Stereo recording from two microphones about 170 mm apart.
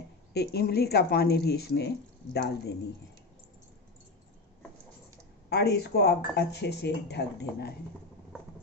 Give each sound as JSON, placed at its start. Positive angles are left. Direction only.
{"t": 0.3, "sound": "a woman's voice", "side_deg": 70}
{"t": 5.5, "sound": "a woman's voice", "side_deg": 75}